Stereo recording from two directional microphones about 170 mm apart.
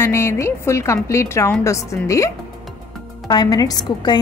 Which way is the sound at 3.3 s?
25° left (ahead or behind).